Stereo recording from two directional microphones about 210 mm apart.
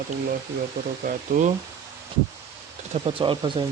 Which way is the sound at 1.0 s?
40° right (ahead or behind).